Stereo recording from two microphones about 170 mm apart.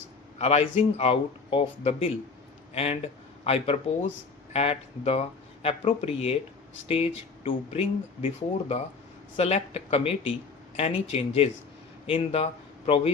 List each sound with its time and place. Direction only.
0.3 s speech: 35° left (ahead or behind)
9.4 s speech: 40° left (ahead or behind)